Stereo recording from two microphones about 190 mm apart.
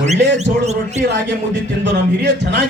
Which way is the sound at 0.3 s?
35° right (ahead or behind).